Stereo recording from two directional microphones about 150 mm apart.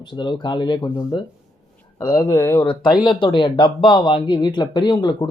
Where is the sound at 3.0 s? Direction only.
30° left (ahead or behind).